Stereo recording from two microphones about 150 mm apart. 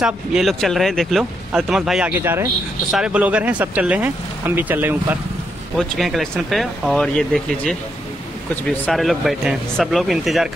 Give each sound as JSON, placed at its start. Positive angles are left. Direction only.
{"t": 0.0, "sound": "speech", "side_deg": 0}
{"t": 5.8, "sound": "speech", "side_deg": 0}